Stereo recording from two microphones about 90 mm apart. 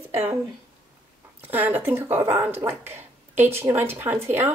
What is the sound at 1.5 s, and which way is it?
A woman's voice, 20° right (ahead or behind).